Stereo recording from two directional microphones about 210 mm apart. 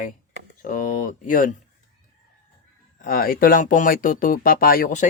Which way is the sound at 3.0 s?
45° left (ahead or behind).